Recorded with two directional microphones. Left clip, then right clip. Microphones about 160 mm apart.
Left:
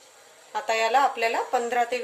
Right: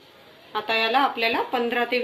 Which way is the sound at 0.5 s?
50° left (ahead or behind).